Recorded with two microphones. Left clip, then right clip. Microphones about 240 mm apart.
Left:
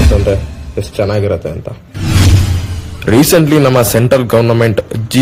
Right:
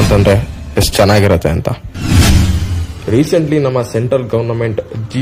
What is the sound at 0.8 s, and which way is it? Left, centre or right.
Speech, right.